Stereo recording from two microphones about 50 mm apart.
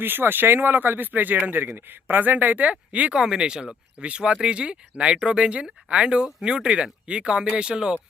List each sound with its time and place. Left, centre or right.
0.0 s speech: right
3.2 s speech: centre